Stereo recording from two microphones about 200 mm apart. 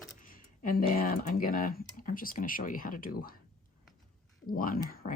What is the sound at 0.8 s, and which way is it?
Speech, 45° left (ahead or behind).